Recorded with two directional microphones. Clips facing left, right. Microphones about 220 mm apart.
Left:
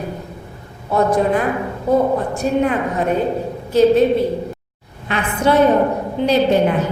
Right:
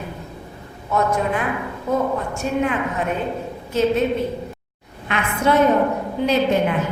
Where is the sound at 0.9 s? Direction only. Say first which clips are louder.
Left 5 dB; 35° left (ahead or behind).